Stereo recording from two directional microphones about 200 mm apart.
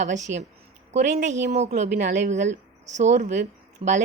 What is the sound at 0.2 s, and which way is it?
Speech, 65° right (ahead or behind).